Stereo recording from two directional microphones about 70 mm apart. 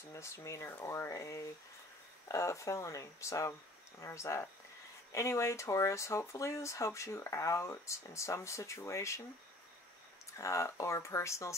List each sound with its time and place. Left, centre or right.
0.1 s speech: left
10.4 s speech: left